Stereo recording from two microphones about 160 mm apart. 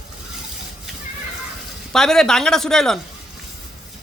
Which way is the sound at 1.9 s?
5° left (ahead or behind).